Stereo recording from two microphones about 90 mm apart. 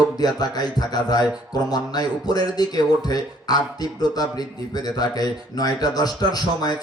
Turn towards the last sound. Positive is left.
turn(degrees=45)  # may be behind; listen again after turning